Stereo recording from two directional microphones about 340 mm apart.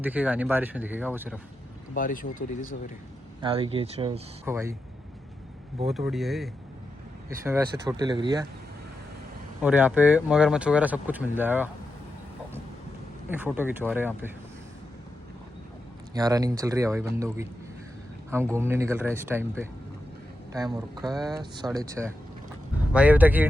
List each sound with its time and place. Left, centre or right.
0.0 s speech: centre
2.0 s speech: left
3.4 s speech: centre
5.9 s speech: centre
9.6 s speech: centre
13.3 s speech: centre
16.1 s speech: centre
18.5 s speech: centre
20.5 s speech: centre